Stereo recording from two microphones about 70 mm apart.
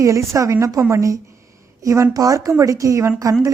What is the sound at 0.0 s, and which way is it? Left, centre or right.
A woman's voice, right.